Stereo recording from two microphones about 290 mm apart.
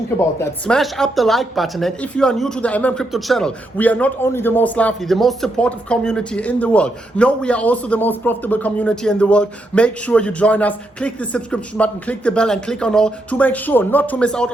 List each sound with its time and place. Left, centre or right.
0.3 s a woman's voice: centre